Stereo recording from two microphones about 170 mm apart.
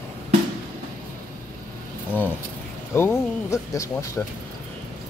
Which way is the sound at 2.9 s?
15° left (ahead or behind).